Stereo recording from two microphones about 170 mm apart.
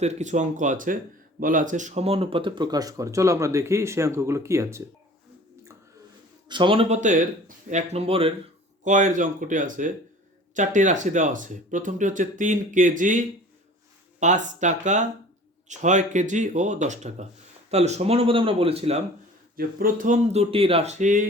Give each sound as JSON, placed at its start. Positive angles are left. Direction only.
{"t": 0.0, "sound": "speech", "side_deg": -40}
{"t": 6.5, "sound": "speech", "side_deg": -30}
{"t": 7.0, "sound": "speech", "side_deg": -45}
{"t": 8.8, "sound": "speech", "side_deg": -45}
{"t": 19.5, "sound": "speech", "side_deg": -55}
{"t": 20.3, "sound": "speech", "side_deg": -35}